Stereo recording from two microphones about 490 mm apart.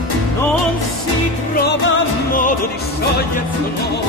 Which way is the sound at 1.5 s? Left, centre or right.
Centre.